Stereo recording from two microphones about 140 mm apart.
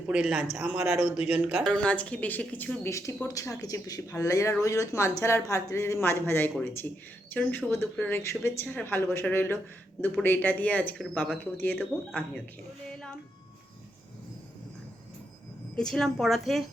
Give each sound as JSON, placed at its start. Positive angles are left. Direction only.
{"t": 0.1, "sound": "speech", "side_deg": -5}
{"t": 1.6, "sound": "speech", "side_deg": 10}
{"t": 2.8, "sound": "speech", "side_deg": 20}
{"t": 15.7, "sound": "a woman's voice", "side_deg": 5}